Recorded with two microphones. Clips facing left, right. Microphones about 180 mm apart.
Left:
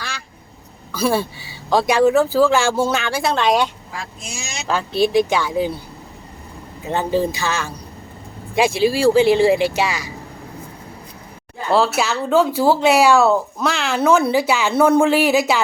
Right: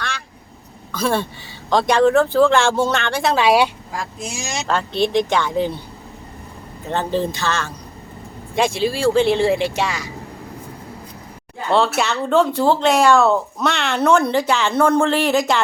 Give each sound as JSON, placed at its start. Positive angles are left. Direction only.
{"t": 0.9, "sound": "speech", "side_deg": 5}
{"t": 3.9, "sound": "speech", "side_deg": -45}
{"t": 4.7, "sound": "speech", "side_deg": 5}
{"t": 6.8, "sound": "speech", "side_deg": 10}
{"t": 11.7, "sound": "speech", "side_deg": 0}